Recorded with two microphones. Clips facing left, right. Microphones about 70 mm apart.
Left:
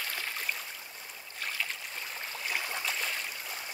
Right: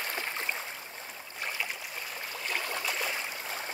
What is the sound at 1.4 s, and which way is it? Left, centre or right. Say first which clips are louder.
Boat: right 1 dB; centre.